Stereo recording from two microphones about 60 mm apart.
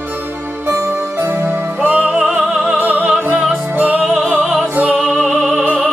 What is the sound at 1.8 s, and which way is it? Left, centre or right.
Music, centre.